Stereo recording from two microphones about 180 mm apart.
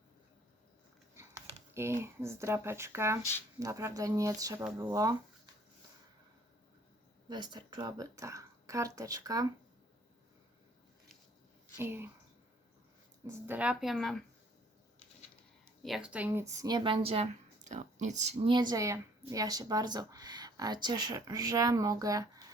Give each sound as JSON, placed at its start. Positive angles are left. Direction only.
{"t": 1.1, "sound": "a sound", "side_deg": -15}
{"t": 1.7, "sound": "speech", "side_deg": -15}
{"t": 7.3, "sound": "speech", "side_deg": -25}
{"t": 11.8, "sound": "speech", "side_deg": -10}
{"t": 13.2, "sound": "speech", "side_deg": -10}
{"t": 15.8, "sound": "speech", "side_deg": -5}
{"t": 17.7, "sound": "speech", "side_deg": -45}
{"t": 18.5, "sound": "speech", "side_deg": -20}